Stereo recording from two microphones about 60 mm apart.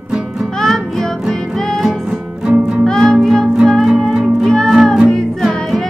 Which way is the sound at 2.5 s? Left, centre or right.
Right.